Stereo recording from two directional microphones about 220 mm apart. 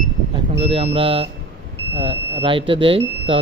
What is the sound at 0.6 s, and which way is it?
Speech, 25° right (ahead or behind).